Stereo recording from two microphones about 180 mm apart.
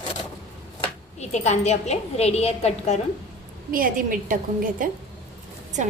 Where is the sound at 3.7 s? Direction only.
50° right (ahead or behind).